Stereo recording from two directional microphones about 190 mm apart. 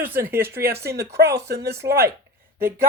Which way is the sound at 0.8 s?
60° right (ahead or behind).